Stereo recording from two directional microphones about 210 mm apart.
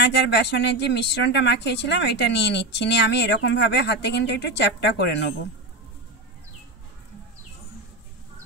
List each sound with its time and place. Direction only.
0.0 s speech: 55° left (ahead or behind)